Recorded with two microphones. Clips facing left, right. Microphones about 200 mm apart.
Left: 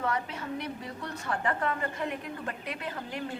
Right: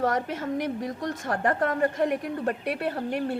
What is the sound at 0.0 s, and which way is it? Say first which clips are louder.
A woman's voice: right 6 dB; 45° right (ahead or behind).